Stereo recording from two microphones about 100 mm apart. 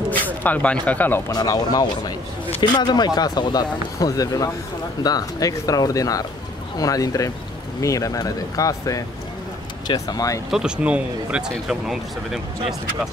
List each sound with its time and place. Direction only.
0.1 s speech: 15° left (ahead or behind)
1.3 s speech: 40° left (ahead or behind)
10.5 s speech: 10° right (ahead or behind)